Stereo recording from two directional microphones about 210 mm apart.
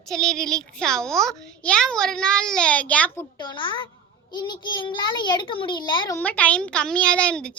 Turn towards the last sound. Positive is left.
turn(degrees=5)  # may be behind; listen again after turning